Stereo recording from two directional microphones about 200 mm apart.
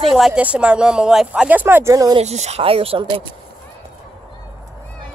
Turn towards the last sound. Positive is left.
turn(degrees=-25)  # may be behind; listen again after turning